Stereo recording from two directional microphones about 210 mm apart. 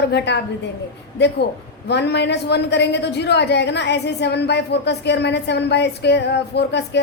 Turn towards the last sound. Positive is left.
turn(degrees=55)  # may be behind; listen again after turning